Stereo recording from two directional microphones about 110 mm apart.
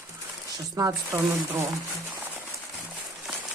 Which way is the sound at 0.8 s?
25° right (ahead or behind).